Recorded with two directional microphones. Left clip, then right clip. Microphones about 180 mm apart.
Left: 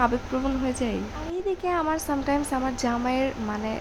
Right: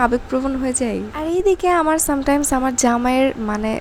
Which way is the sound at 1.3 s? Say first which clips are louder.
Right 11 dB; 35° right (ahead or behind).